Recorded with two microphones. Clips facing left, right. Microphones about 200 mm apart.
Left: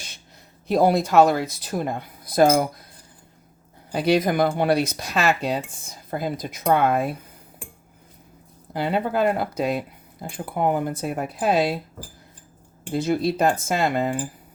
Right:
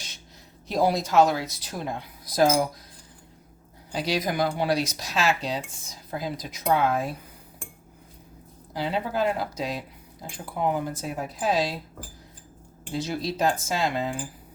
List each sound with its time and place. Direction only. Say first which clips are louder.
0.7 s speech: left 5 dB; 55° left (ahead or behind)
3.9 s speech: left 7 dB; 55° left (ahead or behind)
8.7 s speech: left 4 dB; 55° left (ahead or behind)
12.9 s speech: left 7 dB; 55° left (ahead or behind)